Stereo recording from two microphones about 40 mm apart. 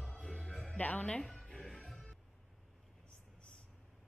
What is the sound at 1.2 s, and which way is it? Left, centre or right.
Music, centre.